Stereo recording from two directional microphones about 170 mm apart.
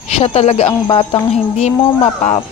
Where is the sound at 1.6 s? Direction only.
40° left (ahead or behind).